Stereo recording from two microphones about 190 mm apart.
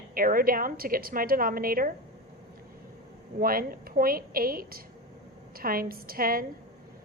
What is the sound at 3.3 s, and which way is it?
A woman's voice, 50° right (ahead or behind).